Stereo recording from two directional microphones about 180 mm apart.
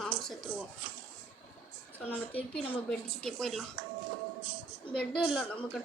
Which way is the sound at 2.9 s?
Centre (ahead or behind).